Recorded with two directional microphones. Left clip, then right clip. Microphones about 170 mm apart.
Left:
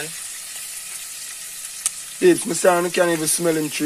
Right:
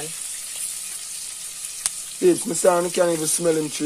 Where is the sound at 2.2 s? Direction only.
25° left (ahead or behind).